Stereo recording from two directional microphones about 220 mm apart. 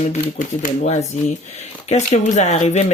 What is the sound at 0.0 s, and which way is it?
Speech, 35° left (ahead or behind).